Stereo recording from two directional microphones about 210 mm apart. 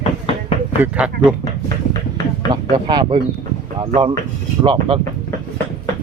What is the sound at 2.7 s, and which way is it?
A man's voice, 20° right (ahead or behind).